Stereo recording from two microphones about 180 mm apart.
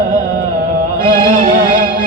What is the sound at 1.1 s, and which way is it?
Music, 50° right (ahead or behind).